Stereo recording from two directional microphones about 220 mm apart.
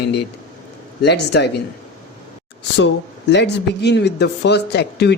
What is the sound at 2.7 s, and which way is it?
Speech, 55° left (ahead or behind).